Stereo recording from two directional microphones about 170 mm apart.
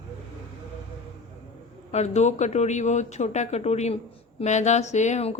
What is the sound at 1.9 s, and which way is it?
Speech, 40° left (ahead or behind).